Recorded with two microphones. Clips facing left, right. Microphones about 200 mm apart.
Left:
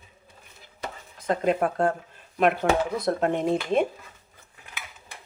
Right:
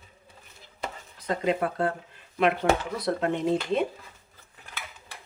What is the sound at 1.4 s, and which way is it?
Speech, 45° left (ahead or behind).